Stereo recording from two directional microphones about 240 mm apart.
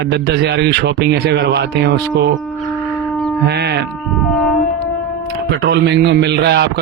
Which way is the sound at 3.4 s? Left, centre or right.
Right.